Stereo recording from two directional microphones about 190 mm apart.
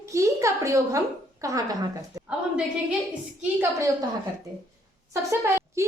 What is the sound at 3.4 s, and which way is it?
Speech, 10° right (ahead or behind).